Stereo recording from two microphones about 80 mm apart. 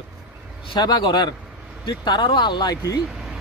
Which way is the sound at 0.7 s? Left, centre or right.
Left.